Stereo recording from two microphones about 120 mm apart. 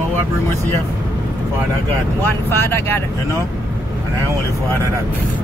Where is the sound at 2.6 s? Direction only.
20° left (ahead or behind).